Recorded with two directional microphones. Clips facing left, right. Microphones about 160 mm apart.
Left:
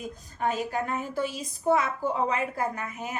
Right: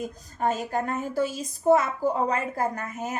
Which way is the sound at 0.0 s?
40° right (ahead or behind).